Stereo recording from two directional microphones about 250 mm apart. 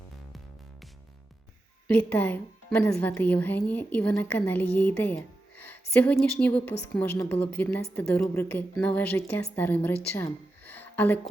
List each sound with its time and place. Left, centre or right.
1.9 s a woman's voice: centre